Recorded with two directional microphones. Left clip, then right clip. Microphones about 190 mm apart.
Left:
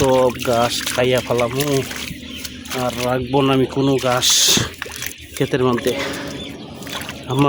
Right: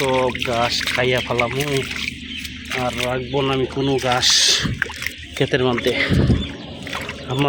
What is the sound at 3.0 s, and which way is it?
Speech, 50° left (ahead or behind).